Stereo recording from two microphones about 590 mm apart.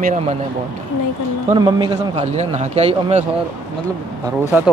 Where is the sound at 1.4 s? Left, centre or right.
Centre.